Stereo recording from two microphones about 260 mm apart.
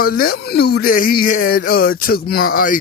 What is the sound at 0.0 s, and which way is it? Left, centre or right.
Speech, left.